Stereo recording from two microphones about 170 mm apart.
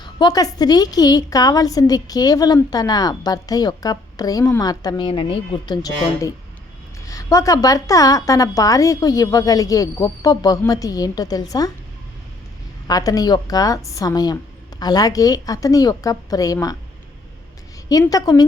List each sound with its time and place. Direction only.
0.0 s a woman's voice: 25° left (ahead or behind)
12.9 s a woman's voice: 20° left (ahead or behind)
18.0 s a woman's voice: 20° left (ahead or behind)